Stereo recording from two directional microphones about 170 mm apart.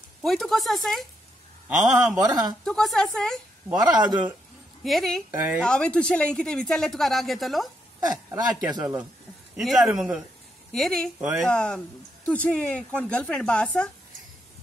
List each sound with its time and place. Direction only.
0.2 s speech: centre (ahead or behind)
2.1 s speech: 20° right (ahead or behind)
2.6 s speech: centre (ahead or behind)
3.6 s speech: 25° right (ahead or behind)
4.8 s speech: centre (ahead or behind)
5.3 s speech: 10° right (ahead or behind)
5.6 s speech: 5° left (ahead or behind)
8.3 s speech: 25° right (ahead or behind)
9.6 s speech: centre (ahead or behind)